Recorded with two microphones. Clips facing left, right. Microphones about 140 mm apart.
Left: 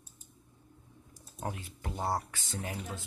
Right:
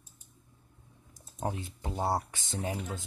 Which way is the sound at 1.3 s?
20° right (ahead or behind).